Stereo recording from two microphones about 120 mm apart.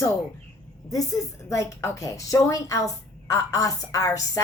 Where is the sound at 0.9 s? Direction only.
30° left (ahead or behind).